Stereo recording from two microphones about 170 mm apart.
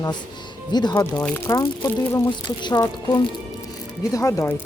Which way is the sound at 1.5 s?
20° left (ahead or behind).